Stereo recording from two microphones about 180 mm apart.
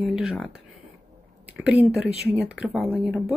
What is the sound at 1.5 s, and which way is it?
Speech, 5° right (ahead or behind).